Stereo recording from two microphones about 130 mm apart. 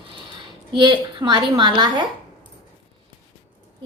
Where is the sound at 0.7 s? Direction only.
40° right (ahead or behind).